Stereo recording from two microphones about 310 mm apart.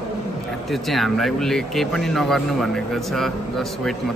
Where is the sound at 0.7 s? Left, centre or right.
Centre.